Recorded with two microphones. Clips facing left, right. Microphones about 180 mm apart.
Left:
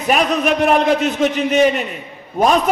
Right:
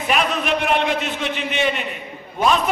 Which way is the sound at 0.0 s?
40° left (ahead or behind).